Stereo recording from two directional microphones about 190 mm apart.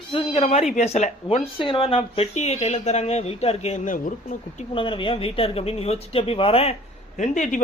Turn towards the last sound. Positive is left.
turn(degrees=40)  # may be behind; listen again after turning